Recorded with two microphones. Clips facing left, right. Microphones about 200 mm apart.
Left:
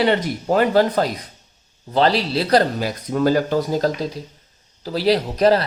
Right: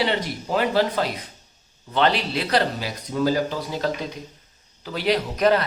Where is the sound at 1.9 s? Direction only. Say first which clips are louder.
Left 4 dB; 35° left (ahead or behind).